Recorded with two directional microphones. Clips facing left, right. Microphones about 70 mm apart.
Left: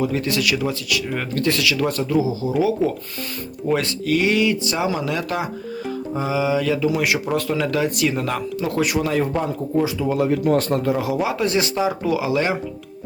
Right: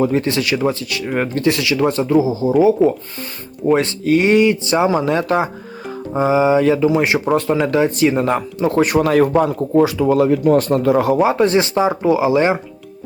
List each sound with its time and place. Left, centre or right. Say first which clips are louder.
0.0 s speech: right 4 dB; right
11.0 s speech: right 7 dB; right